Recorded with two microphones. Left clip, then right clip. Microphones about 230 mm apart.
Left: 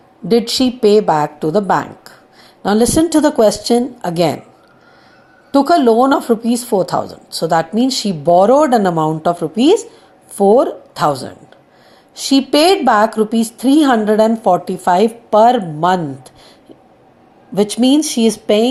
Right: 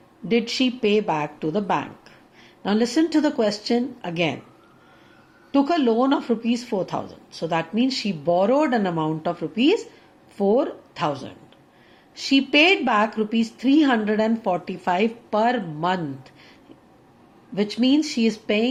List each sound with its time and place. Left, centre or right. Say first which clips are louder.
0.4 s a woman's voice: left 9 dB; left
5.5 s a woman's voice: left 10 dB; left
7.0 s speech: left 12 dB; centre
7.8 s a woman's voice: left 8 dB; left
11.1 s a man's voice: left 10 dB; centre
12.1 s a woman's voice: left 6 dB; left
17.5 s a woman's voice: left 8 dB; left